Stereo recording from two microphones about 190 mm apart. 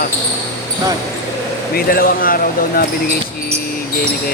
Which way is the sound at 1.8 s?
50° left (ahead or behind).